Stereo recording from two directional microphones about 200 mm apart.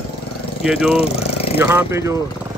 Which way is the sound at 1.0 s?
30° left (ahead or behind).